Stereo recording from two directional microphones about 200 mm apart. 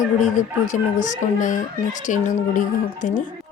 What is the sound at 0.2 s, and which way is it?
Speech, 40° left (ahead or behind).